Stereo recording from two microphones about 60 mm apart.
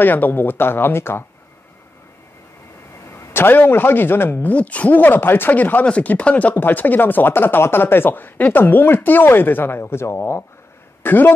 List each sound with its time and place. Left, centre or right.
0.0 s speech: left
3.1 s a man's voice: left
4.5 s speech: left
11.0 s speech: left